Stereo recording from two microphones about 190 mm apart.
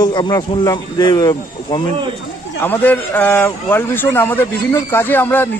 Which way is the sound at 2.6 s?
10° left (ahead or behind).